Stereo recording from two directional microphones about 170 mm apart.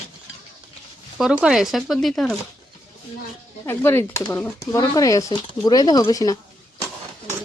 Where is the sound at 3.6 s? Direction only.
15° left (ahead or behind).